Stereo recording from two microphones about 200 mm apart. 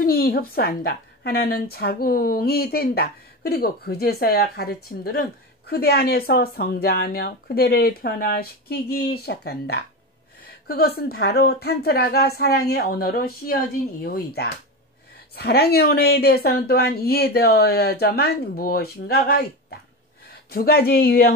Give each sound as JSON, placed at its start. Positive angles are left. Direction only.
{"t": 0.0, "sound": "a woman's voice", "side_deg": 50}
{"t": 20.4, "sound": "a woman's voice", "side_deg": 50}